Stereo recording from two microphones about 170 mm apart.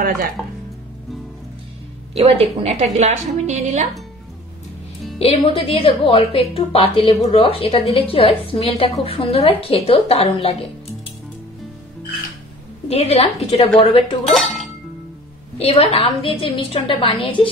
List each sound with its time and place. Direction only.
0.4 s speech: 10° left (ahead or behind)
2.1 s a woman's voice: 35° right (ahead or behind)
5.2 s a woman's voice: 35° left (ahead or behind)
12.8 s a woman's voice: 40° left (ahead or behind)
14.3 s dishes: centre (ahead or behind)
15.5 s a woman's voice: 35° left (ahead or behind)